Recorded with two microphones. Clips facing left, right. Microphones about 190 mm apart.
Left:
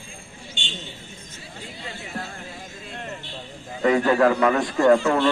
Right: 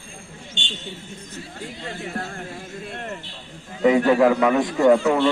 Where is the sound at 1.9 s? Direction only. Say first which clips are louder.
Right 4 dB; 50° right (ahead or behind).